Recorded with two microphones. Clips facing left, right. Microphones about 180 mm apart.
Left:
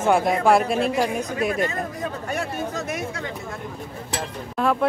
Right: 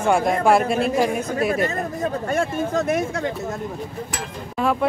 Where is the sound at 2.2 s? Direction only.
50° right (ahead or behind).